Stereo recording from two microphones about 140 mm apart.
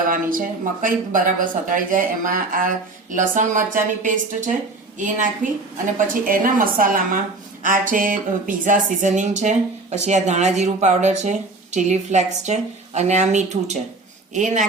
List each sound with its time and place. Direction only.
0.1 s speech: 80° right; by 5.3 s 65° right (ahead or behind)
6.2 s a woman's voice: 85° right
7.6 s speech: 75° right (ahead or behind)